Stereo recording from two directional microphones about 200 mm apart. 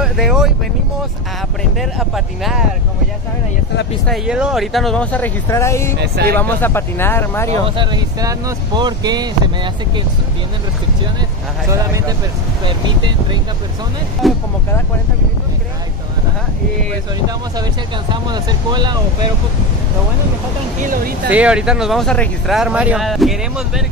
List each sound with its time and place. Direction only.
0.0 s speech: centre (ahead or behind)
1.6 s speech: centre (ahead or behind)
4.1 s speech: 5° right (ahead or behind); by 5.9 s 15° left (ahead or behind)
5.9 s speech: 55° right (ahead or behind)
6.3 s speech: 10° left (ahead or behind)
7.6 s speech: 25° right (ahead or behind)
11.7 s speech: 15° right (ahead or behind)
14.2 s speech: centre (ahead or behind)
18.1 s speech: 20° right (ahead or behind)
20.8 s speech: 45° right (ahead or behind)
21.3 s speech: 5° right (ahead or behind)